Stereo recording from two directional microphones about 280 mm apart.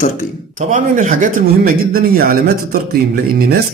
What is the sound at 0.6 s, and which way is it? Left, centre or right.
Speech, right.